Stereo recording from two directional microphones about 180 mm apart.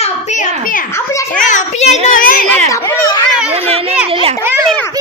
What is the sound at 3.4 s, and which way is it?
Speech, 35° right (ahead or behind).